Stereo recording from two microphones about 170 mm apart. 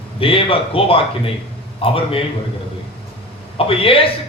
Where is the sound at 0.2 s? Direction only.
30° left (ahead or behind).